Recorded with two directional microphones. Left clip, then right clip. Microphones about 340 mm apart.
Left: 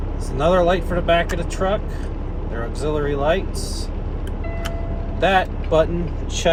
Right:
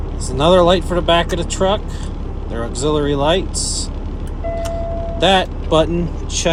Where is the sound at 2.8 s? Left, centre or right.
Centre.